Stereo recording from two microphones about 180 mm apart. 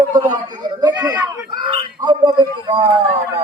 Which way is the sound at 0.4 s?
25° right (ahead or behind).